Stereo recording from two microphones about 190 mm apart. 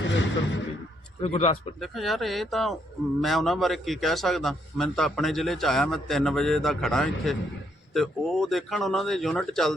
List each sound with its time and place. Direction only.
0.0 s a sound: 75° left (ahead or behind)
1.2 s speech: 35° left (ahead or behind)
1.8 s a man's voice: centre (ahead or behind)